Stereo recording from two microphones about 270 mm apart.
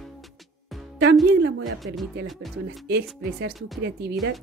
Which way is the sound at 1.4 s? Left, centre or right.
Right.